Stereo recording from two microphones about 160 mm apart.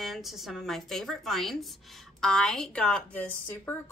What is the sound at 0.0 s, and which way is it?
A woman's voice, centre (ahead or behind).